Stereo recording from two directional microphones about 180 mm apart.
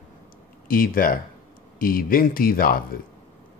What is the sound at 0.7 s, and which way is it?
A man's voice, 50° left (ahead or behind).